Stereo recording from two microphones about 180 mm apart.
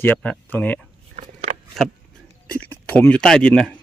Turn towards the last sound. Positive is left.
turn(degrees=5)  # may be behind; listen again after turning